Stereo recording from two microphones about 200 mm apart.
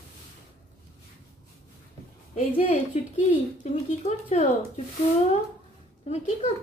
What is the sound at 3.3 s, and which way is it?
Speech, 35° left (ahead or behind).